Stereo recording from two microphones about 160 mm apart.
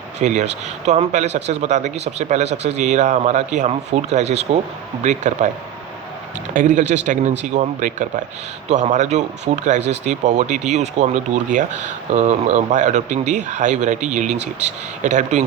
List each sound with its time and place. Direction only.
0.2 s speech: 50° right (ahead or behind)
6.5 s speech: 55° right (ahead or behind)